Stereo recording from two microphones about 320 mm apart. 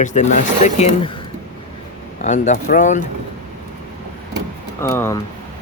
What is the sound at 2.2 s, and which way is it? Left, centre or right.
Speech, left.